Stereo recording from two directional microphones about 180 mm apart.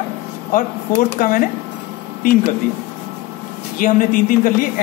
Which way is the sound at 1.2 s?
50° left (ahead or behind).